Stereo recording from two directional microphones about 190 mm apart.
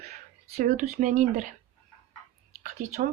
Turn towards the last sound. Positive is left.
turn(degrees=-45)  # may be behind; listen again after turning